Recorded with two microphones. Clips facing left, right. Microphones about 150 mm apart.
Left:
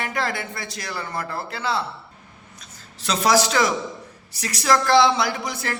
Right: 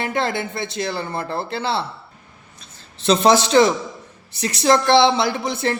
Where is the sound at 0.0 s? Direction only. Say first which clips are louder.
Right 4 dB; 25° right (ahead or behind).